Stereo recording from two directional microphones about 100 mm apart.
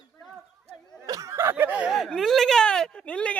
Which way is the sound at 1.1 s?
35° right (ahead or behind).